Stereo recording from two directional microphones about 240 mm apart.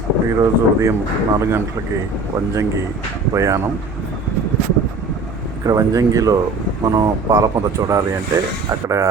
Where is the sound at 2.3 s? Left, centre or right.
Centre.